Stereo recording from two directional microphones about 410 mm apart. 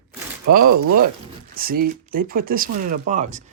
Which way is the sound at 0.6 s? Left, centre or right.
Right.